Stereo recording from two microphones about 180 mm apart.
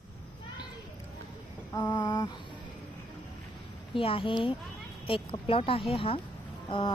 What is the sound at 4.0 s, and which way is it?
Speech, 30° left (ahead or behind).